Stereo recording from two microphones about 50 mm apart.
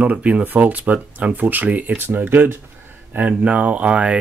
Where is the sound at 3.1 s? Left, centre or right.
Right.